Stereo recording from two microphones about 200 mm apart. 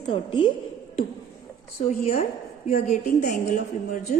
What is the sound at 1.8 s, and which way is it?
A woman's voice, 35° left (ahead or behind).